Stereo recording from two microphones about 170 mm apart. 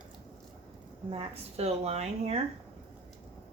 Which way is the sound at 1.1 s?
35° right (ahead or behind).